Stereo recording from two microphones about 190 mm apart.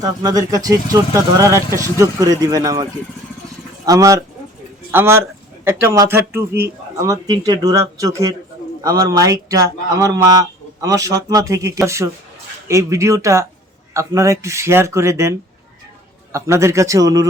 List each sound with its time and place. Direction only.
0.0 s speech: 20° right (ahead or behind)
3.8 s speech: 20° right (ahead or behind)